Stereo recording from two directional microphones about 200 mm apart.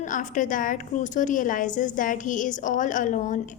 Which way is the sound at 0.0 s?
40° left (ahead or behind).